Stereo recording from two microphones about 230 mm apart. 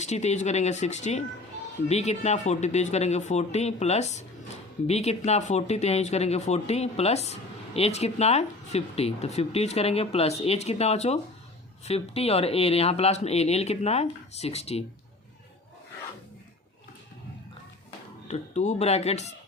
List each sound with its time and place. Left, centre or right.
0.0 s speech: left
18.3 s speech: left